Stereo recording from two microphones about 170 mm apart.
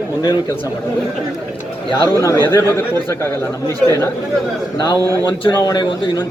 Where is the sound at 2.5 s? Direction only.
15° left (ahead or behind).